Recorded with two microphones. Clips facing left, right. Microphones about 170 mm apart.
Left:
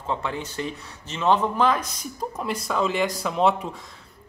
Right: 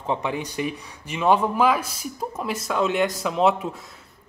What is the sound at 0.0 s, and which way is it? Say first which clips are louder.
A woman's voice: right 3 dB; 15° right (ahead or behind).